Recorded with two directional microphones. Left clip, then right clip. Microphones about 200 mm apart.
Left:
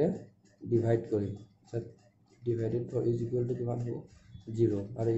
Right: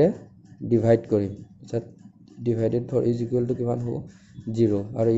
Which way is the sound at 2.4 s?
35° right (ahead or behind).